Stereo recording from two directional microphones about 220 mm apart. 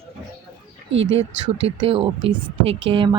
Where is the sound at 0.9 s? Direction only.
60° right (ahead or behind).